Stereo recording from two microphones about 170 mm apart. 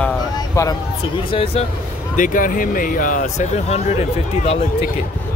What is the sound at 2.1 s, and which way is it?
Speech, 50° left (ahead or behind).